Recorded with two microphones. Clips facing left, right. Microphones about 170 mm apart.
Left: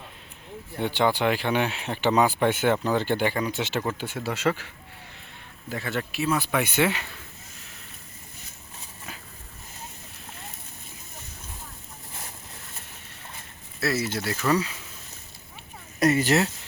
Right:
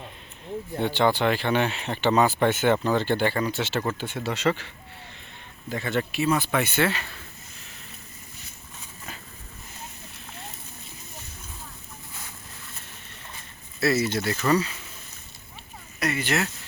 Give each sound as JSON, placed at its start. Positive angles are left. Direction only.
{"t": 0.8, "sound": "speech", "side_deg": 10}
{"t": 13.8, "sound": "speech", "side_deg": 5}
{"t": 16.0, "sound": "speech", "side_deg": 40}